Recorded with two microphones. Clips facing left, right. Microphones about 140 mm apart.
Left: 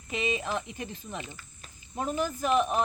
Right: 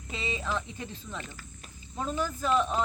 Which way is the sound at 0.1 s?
60° left (ahead or behind).